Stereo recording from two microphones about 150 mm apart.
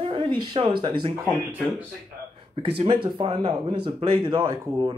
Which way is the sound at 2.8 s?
35° right (ahead or behind).